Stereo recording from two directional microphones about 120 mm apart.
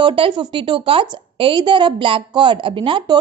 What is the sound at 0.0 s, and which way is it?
A woman's voice, 45° right (ahead or behind).